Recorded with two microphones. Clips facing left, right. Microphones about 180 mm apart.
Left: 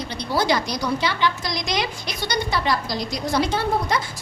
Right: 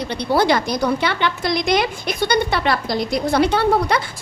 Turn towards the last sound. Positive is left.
turn(degrees=-65)  # may be behind; listen again after turning